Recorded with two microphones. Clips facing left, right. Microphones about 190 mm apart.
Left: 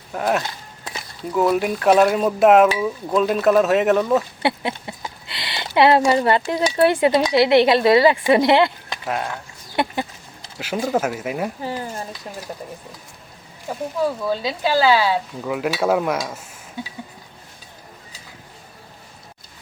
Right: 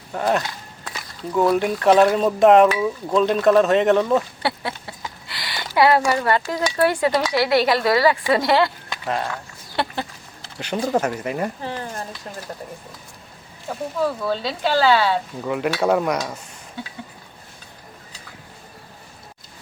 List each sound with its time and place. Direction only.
0.1 s speech: 5° left (ahead or behind)
0.4 s walk: 25° left (ahead or behind)
1.3 s speech: 5° left (ahead or behind)
4.4 s speech: 20° left (ahead or behind)
9.0 s speech: 5° left (ahead or behind)
10.6 s speech: 5° left (ahead or behind)
13.7 s speech: 10° left (ahead or behind)